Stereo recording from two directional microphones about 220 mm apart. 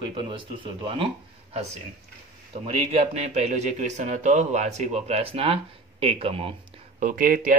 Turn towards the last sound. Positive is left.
turn(degrees=-35)  # may be behind; listen again after turning